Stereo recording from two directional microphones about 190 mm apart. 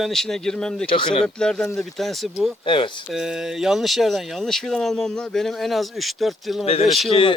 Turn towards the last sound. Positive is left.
turn(degrees=25)  # may be behind; listen again after turning